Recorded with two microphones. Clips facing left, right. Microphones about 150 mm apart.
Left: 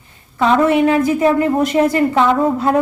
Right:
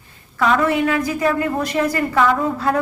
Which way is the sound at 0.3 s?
25° left (ahead or behind).